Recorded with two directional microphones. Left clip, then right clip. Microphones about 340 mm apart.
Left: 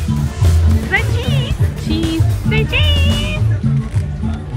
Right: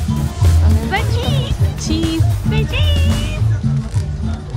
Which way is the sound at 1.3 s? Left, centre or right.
Centre.